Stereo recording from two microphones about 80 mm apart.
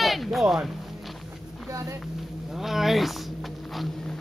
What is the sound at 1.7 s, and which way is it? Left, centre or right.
Speech, right.